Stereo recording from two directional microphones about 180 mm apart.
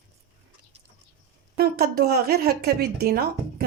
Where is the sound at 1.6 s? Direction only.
60° right (ahead or behind).